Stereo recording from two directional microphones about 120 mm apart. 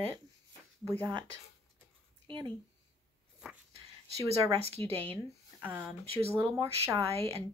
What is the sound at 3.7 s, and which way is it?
Speech, 55° right (ahead or behind).